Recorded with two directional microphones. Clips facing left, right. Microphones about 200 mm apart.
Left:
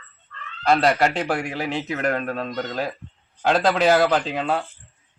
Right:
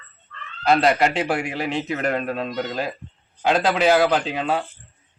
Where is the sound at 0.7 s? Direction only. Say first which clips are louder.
Right 1 dB; 5° right (ahead or behind).